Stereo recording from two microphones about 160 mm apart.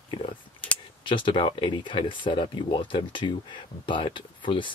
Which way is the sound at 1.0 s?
30° left (ahead or behind).